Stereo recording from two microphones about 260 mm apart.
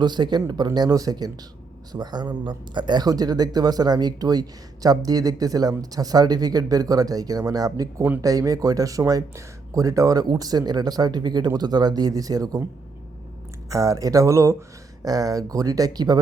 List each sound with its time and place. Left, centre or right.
0.0 s speech: centre
13.7 s speech: centre